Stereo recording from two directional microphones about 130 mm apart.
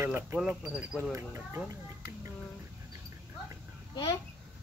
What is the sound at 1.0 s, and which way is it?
Speech, 20° right (ahead or behind).